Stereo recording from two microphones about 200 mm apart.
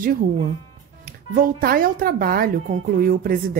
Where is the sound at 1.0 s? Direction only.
45° right (ahead or behind).